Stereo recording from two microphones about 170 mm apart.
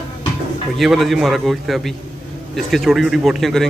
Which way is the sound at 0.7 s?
Centre (ahead or behind).